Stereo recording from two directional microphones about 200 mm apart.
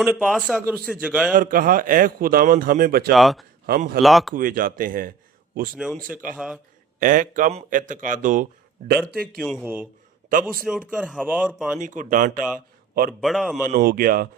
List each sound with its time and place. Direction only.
0.0 s a man's voice: centre (ahead or behind)
1.3 s a man's voice: 45° right (ahead or behind)
3.2 s speech: centre (ahead or behind)
3.7 s a man's voice: 50° right (ahead or behind)
4.0 s speech: centre (ahead or behind)
4.4 s a man's voice: 45° right (ahead or behind)
5.7 s speech: 5° right (ahead or behind)
7.0 s speech: 40° right (ahead or behind)
9.4 s a man's voice: centre (ahead or behind)
10.5 s speech: centre (ahead or behind)
11.8 s speech: 40° right (ahead or behind)
13.1 s speech: centre (ahead or behind)
13.7 s a man's voice: 50° right (ahead or behind)